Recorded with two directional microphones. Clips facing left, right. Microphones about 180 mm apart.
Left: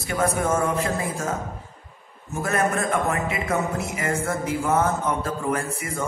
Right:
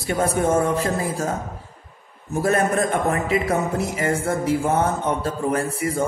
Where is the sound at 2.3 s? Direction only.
30° right (ahead or behind).